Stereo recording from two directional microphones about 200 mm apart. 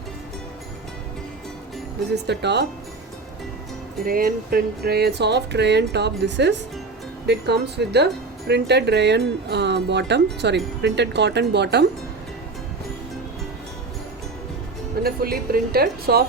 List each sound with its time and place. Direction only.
2.2 s speech: 60° right (ahead or behind)
4.0 s speech: 45° right (ahead or behind)
15.0 s a woman's voice: 50° right (ahead or behind)